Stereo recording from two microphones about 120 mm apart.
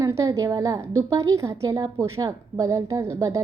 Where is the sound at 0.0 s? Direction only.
25° right (ahead or behind).